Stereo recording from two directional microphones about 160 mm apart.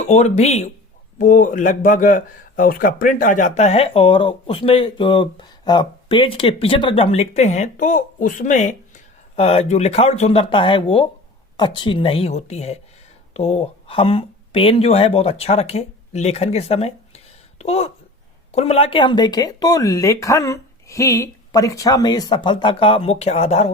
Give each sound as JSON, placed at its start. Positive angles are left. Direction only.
{"t": 0.0, "sound": "speech", "side_deg": 45}
{"t": 9.3, "sound": "speech", "side_deg": 40}